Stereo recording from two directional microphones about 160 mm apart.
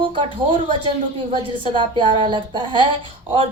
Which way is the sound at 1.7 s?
30° right (ahead or behind).